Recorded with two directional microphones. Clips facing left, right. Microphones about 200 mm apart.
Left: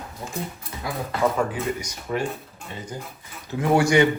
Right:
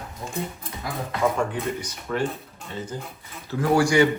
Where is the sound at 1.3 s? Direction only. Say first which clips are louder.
Left 1 dB; 5° left (ahead or behind).